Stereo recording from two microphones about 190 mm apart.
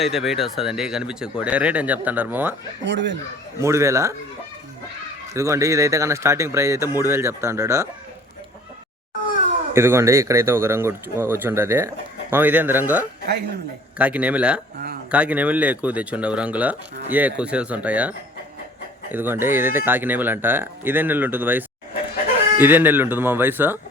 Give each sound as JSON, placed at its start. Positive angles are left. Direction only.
{"t": 0.0, "sound": "speech", "side_deg": 0}
{"t": 2.8, "sound": "speech", "side_deg": -70}
{"t": 3.6, "sound": "speech", "side_deg": -15}
{"t": 5.3, "sound": "speech", "side_deg": -15}
{"t": 9.7, "sound": "speech", "side_deg": -15}
{"t": 19.1, "sound": "speech", "side_deg": -10}